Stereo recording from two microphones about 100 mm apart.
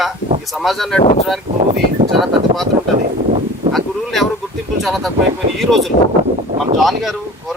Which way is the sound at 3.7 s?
Centre (ahead or behind).